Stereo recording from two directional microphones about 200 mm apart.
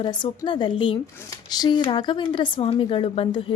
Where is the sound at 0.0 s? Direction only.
25° left (ahead or behind).